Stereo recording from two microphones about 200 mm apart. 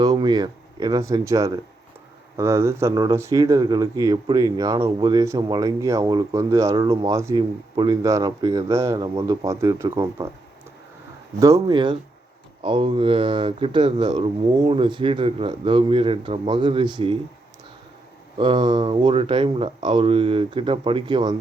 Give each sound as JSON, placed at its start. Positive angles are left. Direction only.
{"t": 0.0, "sound": "speech", "side_deg": -20}
{"t": 11.3, "sound": "speech", "side_deg": -15}
{"t": 18.3, "sound": "speech", "side_deg": -20}